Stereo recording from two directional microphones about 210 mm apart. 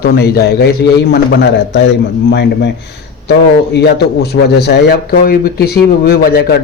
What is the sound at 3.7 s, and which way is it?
A man's voice, 50° left (ahead or behind).